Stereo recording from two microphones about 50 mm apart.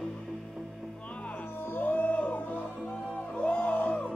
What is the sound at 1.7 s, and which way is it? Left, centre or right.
Music, left.